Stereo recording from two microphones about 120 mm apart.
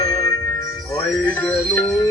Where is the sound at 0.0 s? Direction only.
25° left (ahead or behind).